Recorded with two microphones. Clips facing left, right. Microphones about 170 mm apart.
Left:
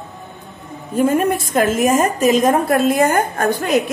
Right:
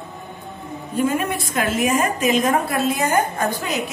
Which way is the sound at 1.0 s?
50° left (ahead or behind).